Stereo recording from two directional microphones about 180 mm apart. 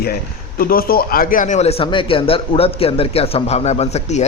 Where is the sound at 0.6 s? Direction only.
55° left (ahead or behind).